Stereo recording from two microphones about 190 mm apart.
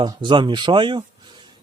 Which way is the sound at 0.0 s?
25° right (ahead or behind).